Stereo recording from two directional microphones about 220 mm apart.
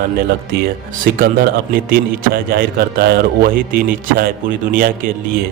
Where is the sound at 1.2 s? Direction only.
45° right (ahead or behind).